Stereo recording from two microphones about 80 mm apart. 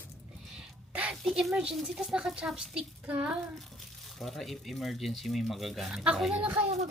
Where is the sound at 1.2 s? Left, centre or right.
Centre.